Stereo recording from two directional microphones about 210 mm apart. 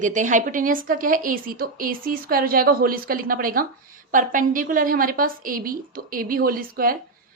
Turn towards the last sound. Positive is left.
turn(degrees=-45)  # may be behind; listen again after turning